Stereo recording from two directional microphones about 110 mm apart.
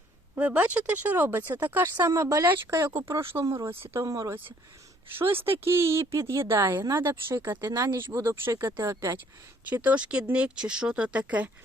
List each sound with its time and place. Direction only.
0.3 s speech: 15° right (ahead or behind); by 4.4 s 30° right (ahead or behind)
5.4 s speech: 20° right (ahead or behind)
7.6 s speech: 35° right (ahead or behind)
7.9 s speech: 20° right (ahead or behind)